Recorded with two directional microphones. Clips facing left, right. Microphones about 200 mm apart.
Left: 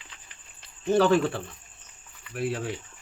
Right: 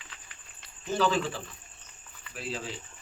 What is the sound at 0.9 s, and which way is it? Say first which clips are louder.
Speech: left 7 dB; 60° left (ahead or behind).